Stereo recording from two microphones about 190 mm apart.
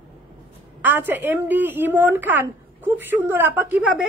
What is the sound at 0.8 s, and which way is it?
A woman's voice, 10° right (ahead or behind).